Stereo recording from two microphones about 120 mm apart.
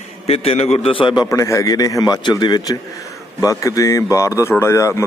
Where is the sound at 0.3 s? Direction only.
55° left (ahead or behind).